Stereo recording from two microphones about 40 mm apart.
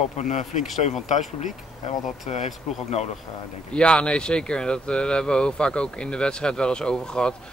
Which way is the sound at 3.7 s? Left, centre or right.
Left.